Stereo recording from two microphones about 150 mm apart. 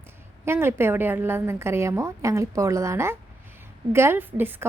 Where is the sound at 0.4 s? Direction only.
15° right (ahead or behind).